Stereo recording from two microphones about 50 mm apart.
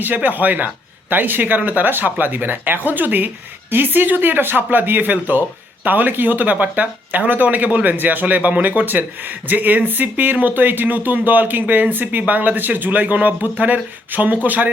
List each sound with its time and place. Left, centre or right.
0.0 s a man's voice: right